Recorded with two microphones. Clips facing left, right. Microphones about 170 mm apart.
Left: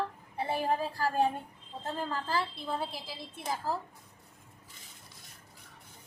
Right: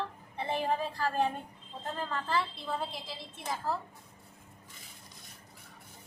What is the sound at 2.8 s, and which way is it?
Speech, 5° left (ahead or behind).